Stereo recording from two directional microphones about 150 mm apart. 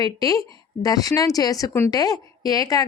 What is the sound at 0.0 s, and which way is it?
A woman's voice, 25° left (ahead or behind).